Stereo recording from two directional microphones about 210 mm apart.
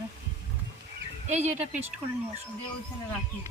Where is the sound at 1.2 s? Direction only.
35° right (ahead or behind).